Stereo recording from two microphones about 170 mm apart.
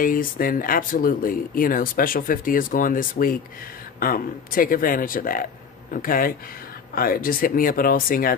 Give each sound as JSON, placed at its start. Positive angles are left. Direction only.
{"t": 0.0, "sound": "speech", "side_deg": 55}